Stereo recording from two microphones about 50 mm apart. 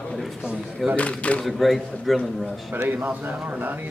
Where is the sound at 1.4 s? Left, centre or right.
Centre.